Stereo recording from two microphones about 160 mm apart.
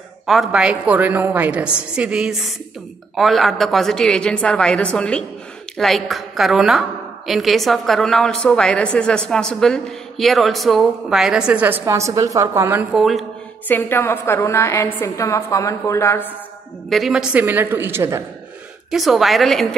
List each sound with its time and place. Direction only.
0.3 s a woman's voice: centre (ahead or behind)
12.9 s a woman's voice: centre (ahead or behind)
13.7 s a woman's voice: 15° left (ahead or behind)
16.9 s a woman's voice: 5° right (ahead or behind)
18.9 s a woman's voice: centre (ahead or behind)